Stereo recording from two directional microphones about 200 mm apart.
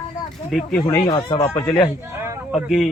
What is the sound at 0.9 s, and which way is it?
Speech, 20° left (ahead or behind).